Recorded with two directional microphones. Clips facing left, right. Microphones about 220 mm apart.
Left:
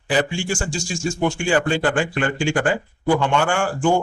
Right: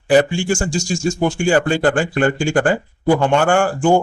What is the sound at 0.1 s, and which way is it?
Speech, 45° right (ahead or behind).